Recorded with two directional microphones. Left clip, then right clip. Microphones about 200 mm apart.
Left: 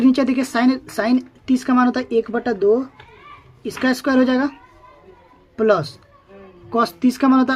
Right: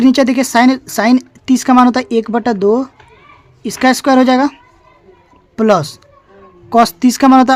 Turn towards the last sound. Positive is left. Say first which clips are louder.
# right 8 dB
turn(degrees=-50)  # may be behind; listen again after turning